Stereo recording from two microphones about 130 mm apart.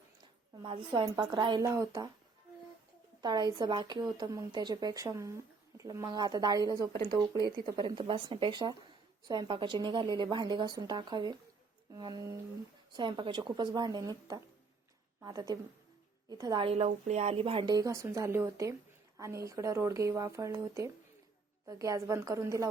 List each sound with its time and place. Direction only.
0.6 s speech: 40° right (ahead or behind)
3.2 s speech: 35° right (ahead or behind)
12.9 s speech: 40° right (ahead or behind)
16.6 s a woman's voice: 55° right (ahead or behind)
17.7 s speech: 25° right (ahead or behind)